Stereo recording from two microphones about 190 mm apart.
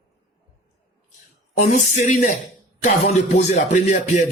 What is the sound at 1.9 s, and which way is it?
Speech, 40° left (ahead or behind).